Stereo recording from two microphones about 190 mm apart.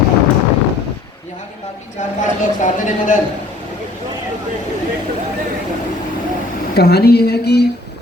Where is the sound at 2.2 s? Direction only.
40° left (ahead or behind).